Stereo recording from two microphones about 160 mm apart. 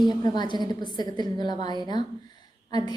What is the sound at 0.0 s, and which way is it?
A woman's voice, 25° left (ahead or behind).